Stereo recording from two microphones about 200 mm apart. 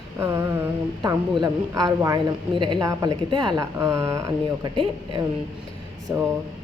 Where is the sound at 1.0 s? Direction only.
20° right (ahead or behind).